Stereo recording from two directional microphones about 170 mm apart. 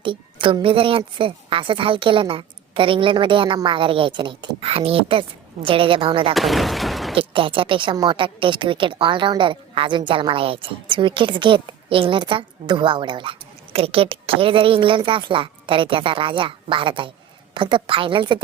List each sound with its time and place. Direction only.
0.0 s a woman's voice: 30° right (ahead or behind)
6.3 s speech: centre (ahead or behind)
7.2 s a woman's voice: 30° right (ahead or behind)